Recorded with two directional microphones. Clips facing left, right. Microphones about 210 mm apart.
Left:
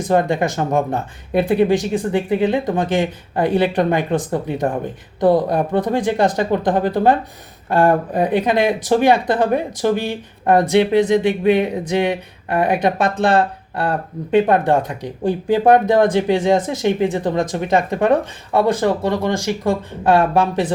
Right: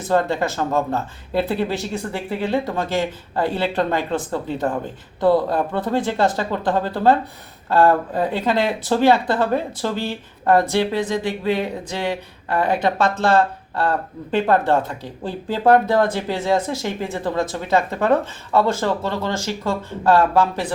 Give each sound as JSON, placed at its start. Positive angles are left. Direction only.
{"t": 0.1, "sound": "speech", "side_deg": 15}